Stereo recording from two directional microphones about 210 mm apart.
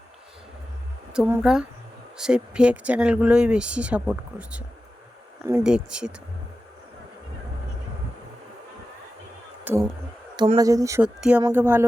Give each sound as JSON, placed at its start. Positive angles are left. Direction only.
{"t": 1.1, "sound": "speech", "side_deg": -5}
{"t": 9.6, "sound": "speech", "side_deg": -10}